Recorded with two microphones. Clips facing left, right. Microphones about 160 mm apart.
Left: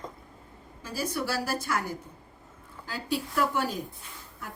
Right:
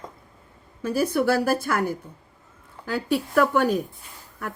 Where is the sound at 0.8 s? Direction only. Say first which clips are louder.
Right 10 dB; 55° right (ahead or behind).